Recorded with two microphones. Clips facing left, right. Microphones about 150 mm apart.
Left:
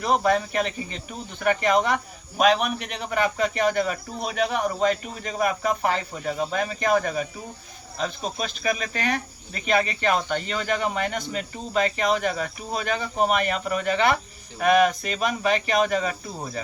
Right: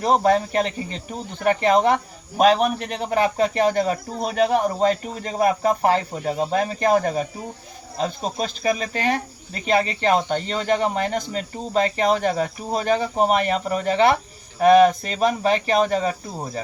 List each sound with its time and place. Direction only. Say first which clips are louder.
0.0 s speech: right 4 dB; 35° right (ahead or behind)